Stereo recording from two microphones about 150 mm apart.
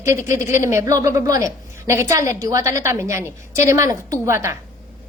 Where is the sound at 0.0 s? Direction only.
20° right (ahead or behind).